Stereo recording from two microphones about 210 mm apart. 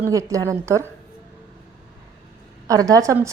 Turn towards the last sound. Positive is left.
turn(degrees=-15)  # may be behind; listen again after turning